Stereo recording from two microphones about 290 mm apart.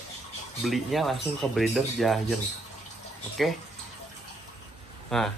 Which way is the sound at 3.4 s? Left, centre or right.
Centre.